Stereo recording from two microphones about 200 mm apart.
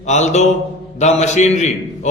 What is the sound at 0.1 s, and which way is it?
A man's voice, 35° left (ahead or behind).